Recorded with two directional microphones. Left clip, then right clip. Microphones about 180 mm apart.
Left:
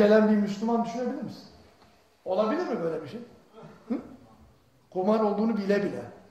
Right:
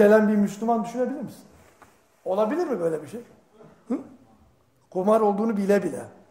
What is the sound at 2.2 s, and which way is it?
Speech, 50° right (ahead or behind).